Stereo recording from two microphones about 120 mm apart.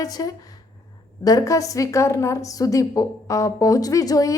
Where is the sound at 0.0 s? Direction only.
30° left (ahead or behind).